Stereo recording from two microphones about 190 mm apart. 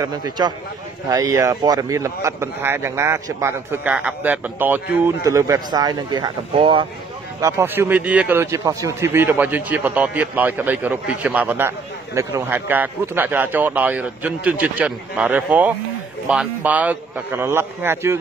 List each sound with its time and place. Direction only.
0.0 s a man's voice: 20° right (ahead or behind)
7.3 s speech: 15° right (ahead or behind)